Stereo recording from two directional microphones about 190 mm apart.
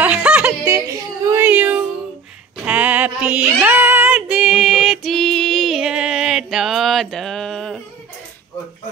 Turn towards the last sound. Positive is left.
turn(degrees=0)  # may be behind; listen again after turning